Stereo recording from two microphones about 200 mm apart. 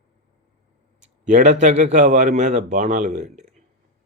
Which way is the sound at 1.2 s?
40° right (ahead or behind).